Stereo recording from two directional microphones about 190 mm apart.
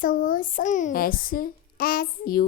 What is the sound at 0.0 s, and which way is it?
A child's voice, 45° left (ahead or behind).